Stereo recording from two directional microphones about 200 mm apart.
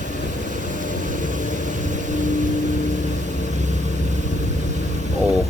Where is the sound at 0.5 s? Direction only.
40° right (ahead or behind).